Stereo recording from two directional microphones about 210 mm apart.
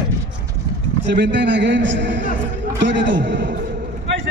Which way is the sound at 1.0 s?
60° right (ahead or behind).